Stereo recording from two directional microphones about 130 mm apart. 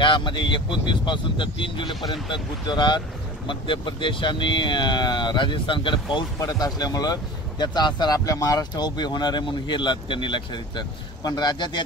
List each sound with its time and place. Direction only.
0.0 s speech: 40° left (ahead or behind)
6.4 s speech: 30° left (ahead or behind)